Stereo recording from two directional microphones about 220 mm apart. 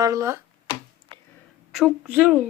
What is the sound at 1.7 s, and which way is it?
Speech, centre (ahead or behind).